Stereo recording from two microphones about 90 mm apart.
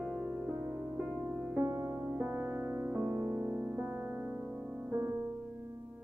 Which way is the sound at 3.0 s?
35° right (ahead or behind).